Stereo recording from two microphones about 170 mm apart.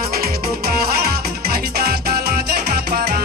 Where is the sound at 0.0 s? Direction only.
60° right (ahead or behind).